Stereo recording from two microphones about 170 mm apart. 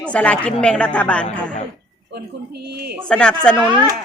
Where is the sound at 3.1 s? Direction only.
5° left (ahead or behind).